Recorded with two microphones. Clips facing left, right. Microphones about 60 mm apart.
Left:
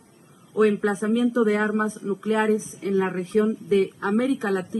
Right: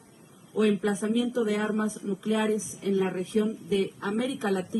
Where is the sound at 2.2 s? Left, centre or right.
Left.